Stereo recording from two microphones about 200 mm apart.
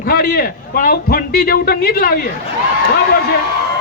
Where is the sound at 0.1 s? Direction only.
50° left (ahead or behind).